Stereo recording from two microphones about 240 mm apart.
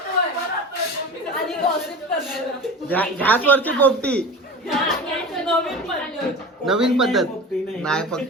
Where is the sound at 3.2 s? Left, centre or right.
Centre.